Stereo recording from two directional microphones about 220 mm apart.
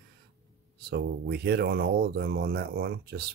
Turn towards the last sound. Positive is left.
turn(degrees=-45)  # may be behind; listen again after turning